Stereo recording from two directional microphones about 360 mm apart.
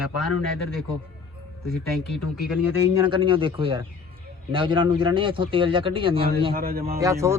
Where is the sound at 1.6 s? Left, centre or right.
Centre; by 6.9 s right.